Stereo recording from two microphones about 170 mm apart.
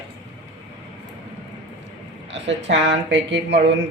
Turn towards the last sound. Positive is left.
turn(degrees=-90)